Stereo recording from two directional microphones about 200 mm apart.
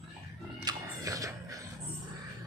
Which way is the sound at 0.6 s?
15° right (ahead or behind).